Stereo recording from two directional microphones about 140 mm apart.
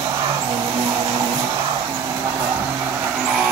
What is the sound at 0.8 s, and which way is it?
Music, 35° right (ahead or behind).